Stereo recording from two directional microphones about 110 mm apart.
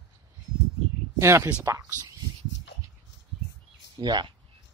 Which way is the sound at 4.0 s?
40° right (ahead or behind).